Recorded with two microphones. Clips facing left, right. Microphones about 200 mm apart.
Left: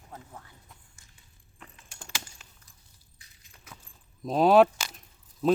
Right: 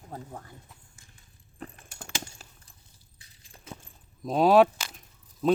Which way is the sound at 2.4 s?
40° right (ahead or behind).